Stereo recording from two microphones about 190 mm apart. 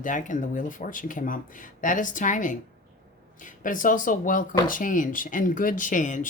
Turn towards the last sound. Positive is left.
turn(degrees=40)  # may be behind; listen again after turning